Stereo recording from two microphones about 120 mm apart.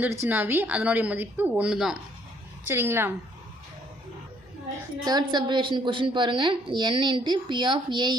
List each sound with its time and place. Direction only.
0.0 s speech: 20° right (ahead or behind); by 2.0 s 5° right (ahead or behind)
2.6 s a woman's voice: 20° right (ahead or behind)
5.0 s a woman's voice: 35° right (ahead or behind)